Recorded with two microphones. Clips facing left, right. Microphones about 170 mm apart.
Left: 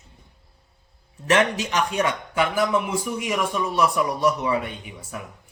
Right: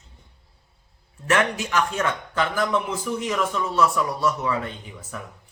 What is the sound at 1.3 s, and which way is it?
Speech, 20° left (ahead or behind).